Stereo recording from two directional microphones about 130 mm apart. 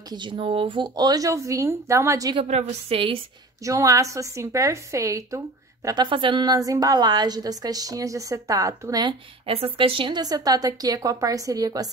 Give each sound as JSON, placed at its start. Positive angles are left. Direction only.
{"t": 0.1, "sound": "a woman's voice", "side_deg": -40}
{"t": 2.4, "sound": "a woman's voice", "side_deg": -55}
{"t": 3.6, "sound": "a woman's voice", "side_deg": -25}
{"t": 5.9, "sound": "a woman's voice", "side_deg": -35}
{"t": 9.8, "sound": "a woman's voice", "side_deg": -40}